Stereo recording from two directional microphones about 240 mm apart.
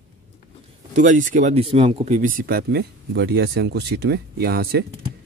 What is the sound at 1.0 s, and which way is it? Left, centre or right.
Speech, right.